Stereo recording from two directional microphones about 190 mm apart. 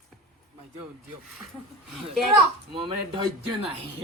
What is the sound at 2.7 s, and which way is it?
Speech, 25° right (ahead or behind).